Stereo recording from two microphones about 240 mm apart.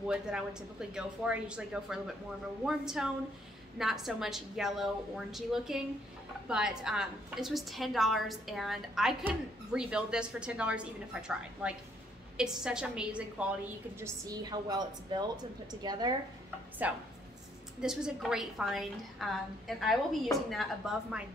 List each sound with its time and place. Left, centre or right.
0.1 s a woman's voice: centre
16.8 s a woman's voice: centre